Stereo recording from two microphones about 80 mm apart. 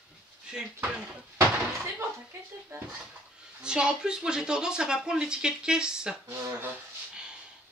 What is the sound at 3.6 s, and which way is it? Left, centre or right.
Speech, centre.